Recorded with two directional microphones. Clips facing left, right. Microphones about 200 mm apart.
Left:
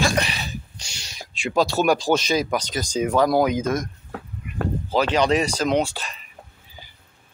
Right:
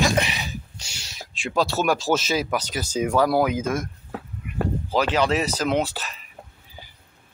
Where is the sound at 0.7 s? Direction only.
5° right (ahead or behind).